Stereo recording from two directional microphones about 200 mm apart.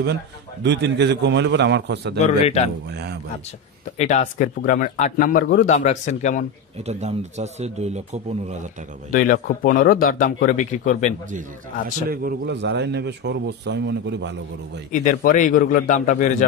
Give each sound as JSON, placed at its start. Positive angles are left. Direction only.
{"t": 0.7, "sound": "a man's voice", "side_deg": -60}
{"t": 2.2, "sound": "speech", "side_deg": 30}
{"t": 2.9, "sound": "speech", "side_deg": -55}
{"t": 4.0, "sound": "speech", "side_deg": 40}
{"t": 6.9, "sound": "a man's voice", "side_deg": -35}
{"t": 9.1, "sound": "speech", "side_deg": 40}
{"t": 12.1, "sound": "a man's voice", "side_deg": -50}
{"t": 14.9, "sound": "speech", "side_deg": 40}